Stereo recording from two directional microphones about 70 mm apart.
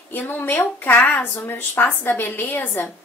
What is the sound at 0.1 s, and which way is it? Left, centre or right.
Speech, left.